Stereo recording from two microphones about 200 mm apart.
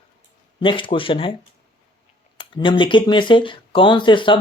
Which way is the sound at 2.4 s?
25° left (ahead or behind).